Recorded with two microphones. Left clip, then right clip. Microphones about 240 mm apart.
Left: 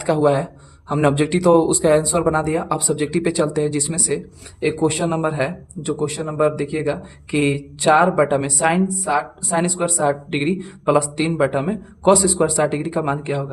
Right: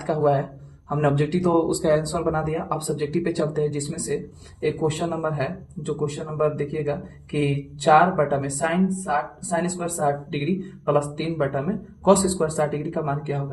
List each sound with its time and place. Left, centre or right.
0.0 s a man's voice: left